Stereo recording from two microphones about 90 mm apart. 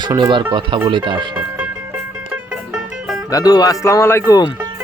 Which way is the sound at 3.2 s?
45° left (ahead or behind).